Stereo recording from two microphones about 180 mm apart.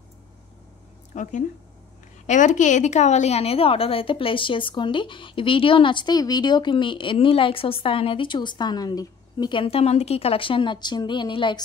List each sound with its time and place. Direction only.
1.1 s a woman's voice: 45° left (ahead or behind); by 11.6 s 25° left (ahead or behind)